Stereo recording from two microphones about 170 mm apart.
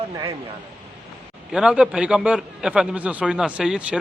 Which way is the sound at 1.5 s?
5° right (ahead or behind).